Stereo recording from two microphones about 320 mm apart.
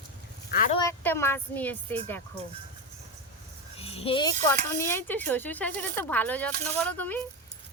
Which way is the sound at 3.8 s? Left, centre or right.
Centre.